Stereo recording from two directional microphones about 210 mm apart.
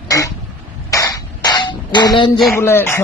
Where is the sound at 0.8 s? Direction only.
15° left (ahead or behind).